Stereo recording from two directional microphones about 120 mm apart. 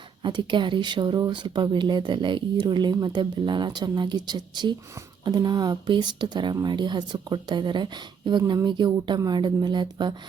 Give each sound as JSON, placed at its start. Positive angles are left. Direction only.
{"t": 0.2, "sound": "speech", "side_deg": -40}